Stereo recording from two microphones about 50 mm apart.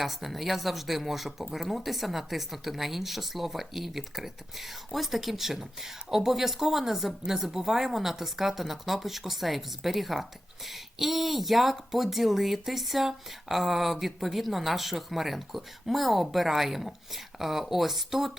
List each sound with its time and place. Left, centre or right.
0.0 s speech: centre